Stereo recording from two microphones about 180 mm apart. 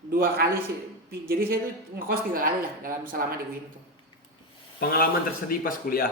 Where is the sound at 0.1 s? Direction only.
55° right (ahead or behind).